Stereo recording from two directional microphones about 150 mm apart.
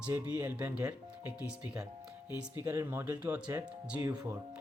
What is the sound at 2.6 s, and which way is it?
Speech, 20° right (ahead or behind).